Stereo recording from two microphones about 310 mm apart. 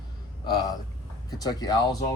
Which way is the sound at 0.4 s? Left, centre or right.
Centre.